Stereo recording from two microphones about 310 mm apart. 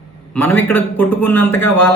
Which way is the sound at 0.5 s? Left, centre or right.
Centre.